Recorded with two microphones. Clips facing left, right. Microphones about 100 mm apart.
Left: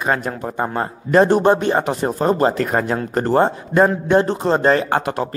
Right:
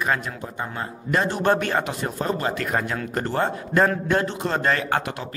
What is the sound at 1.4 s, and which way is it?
Speech, 20° left (ahead or behind).